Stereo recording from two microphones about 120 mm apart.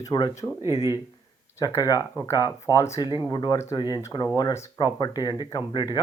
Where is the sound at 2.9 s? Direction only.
40° left (ahead or behind).